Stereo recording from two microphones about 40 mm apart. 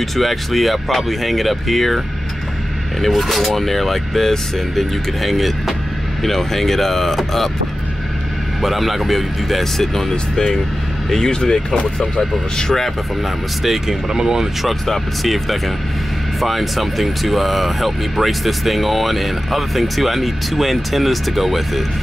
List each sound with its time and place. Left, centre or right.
0.0 s speech: centre
3.0 s speech: centre
8.5 s speech: centre
13.6 s speech: centre
14.7 s speech: centre